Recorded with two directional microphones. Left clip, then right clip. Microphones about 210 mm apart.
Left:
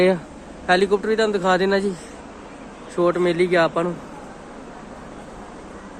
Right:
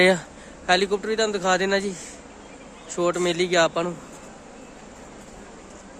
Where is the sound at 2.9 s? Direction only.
10° right (ahead or behind).